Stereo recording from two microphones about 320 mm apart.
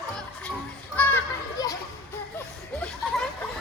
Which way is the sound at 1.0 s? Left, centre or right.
Centre.